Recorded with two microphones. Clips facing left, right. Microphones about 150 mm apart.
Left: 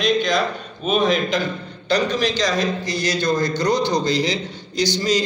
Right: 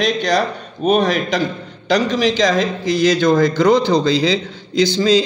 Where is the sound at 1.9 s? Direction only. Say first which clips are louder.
Right 4 dB; 90° right.